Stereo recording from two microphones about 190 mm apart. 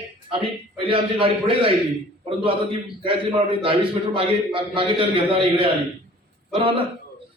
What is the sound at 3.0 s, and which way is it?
A man's voice, 30° right (ahead or behind).